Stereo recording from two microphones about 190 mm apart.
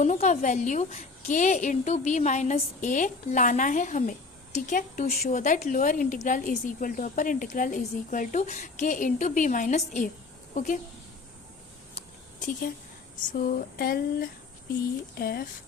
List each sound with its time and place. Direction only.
0.0 s a woman's voice: 40° left (ahead or behind)
11.9 s a sound: 45° left (ahead or behind)
13.1 s speech: 45° left (ahead or behind)